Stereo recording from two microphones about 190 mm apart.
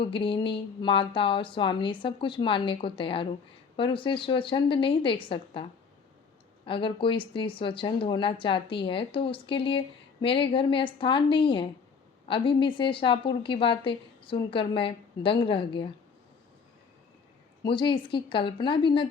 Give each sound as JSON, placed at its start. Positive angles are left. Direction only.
{"t": 0.0, "sound": "speech", "side_deg": 25}
{"t": 6.7, "sound": "speech", "side_deg": 25}
{"t": 17.6, "sound": "speech", "side_deg": 25}